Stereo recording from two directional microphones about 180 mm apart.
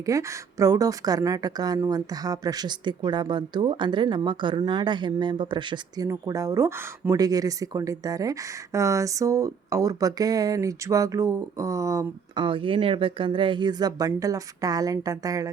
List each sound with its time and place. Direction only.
0.0 s speech: 20° right (ahead or behind)